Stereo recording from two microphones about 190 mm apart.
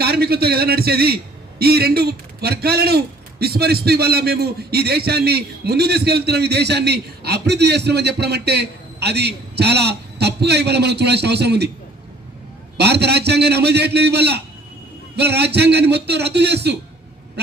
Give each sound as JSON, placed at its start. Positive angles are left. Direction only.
{"t": 0.0, "sound": "a man's voice", "side_deg": -55}
{"t": 12.7, "sound": "a man's voice", "side_deg": -60}